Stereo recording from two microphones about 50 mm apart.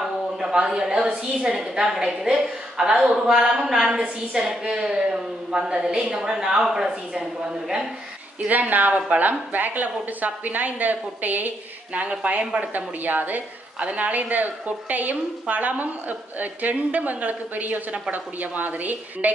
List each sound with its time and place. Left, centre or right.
0.0 s a woman's voice: centre
3.9 s a woman's voice: right
8.5 s a woman's voice: right